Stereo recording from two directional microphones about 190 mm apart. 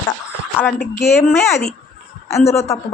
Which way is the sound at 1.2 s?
15° left (ahead or behind).